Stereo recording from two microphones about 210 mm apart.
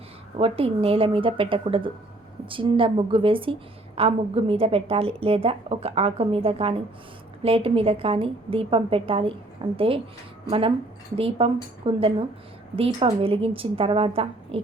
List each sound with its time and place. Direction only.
0.3 s a woman's voice: 25° right (ahead or behind)